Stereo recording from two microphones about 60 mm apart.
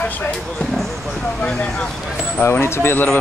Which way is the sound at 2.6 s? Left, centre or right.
Left.